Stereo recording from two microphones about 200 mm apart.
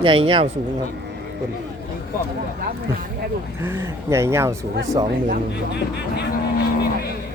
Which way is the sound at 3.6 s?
15° right (ahead or behind).